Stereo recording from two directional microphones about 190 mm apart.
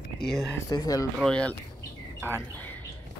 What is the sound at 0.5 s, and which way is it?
Speech, 20° left (ahead or behind).